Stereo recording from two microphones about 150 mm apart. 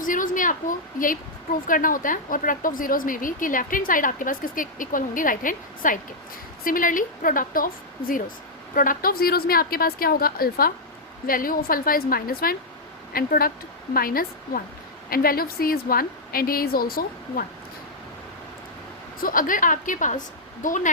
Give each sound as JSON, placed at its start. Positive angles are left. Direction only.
{"t": 0.0, "sound": "a woman's voice", "side_deg": 60}
{"t": 11.3, "sound": "a woman's voice", "side_deg": 70}
{"t": 19.2, "sound": "a woman's voice", "side_deg": 65}